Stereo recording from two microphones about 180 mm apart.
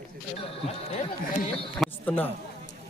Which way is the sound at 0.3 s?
30° left (ahead or behind).